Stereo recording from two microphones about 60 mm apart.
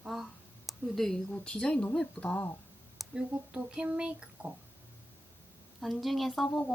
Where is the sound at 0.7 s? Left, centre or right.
Centre.